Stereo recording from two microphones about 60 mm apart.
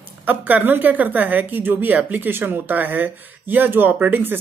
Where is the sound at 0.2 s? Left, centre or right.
Right.